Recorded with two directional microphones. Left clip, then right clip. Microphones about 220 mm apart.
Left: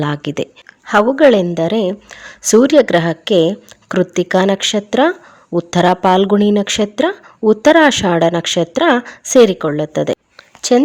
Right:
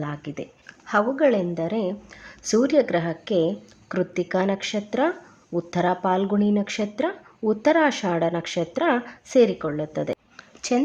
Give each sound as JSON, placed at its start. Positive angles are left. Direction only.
{"t": 0.0, "sound": "a woman's voice", "side_deg": 40}